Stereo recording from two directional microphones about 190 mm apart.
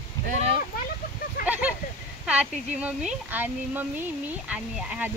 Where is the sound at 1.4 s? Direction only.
5° right (ahead or behind).